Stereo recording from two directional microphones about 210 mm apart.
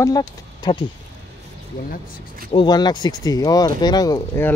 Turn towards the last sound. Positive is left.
turn(degrees=15)  # may be behind; listen again after turning